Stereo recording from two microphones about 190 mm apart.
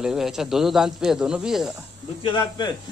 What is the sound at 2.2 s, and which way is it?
Speech, 25° left (ahead or behind).